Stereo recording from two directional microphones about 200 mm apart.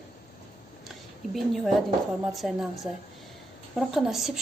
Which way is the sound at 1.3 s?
Centre (ahead or behind).